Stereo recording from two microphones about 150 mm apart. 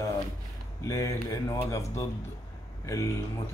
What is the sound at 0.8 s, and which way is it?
A man's voice, 20° left (ahead or behind).